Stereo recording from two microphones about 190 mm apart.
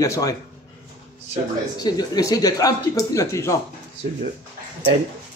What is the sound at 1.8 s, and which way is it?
A man's voice, 20° left (ahead or behind).